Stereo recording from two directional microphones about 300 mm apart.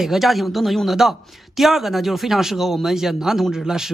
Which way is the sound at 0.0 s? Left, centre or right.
Centre.